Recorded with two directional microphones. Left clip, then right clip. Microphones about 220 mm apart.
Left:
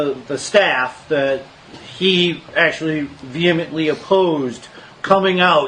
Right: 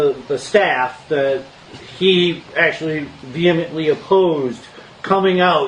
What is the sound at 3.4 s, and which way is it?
Speech, 40° left (ahead or behind).